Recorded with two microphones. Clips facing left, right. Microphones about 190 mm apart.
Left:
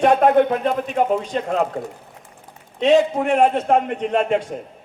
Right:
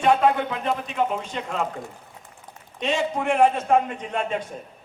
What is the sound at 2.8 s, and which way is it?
A man's voice, 60° left (ahead or behind).